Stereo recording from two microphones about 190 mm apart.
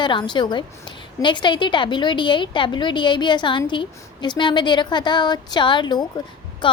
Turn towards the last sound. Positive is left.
turn(degrees=25)  # may be behind; listen again after turning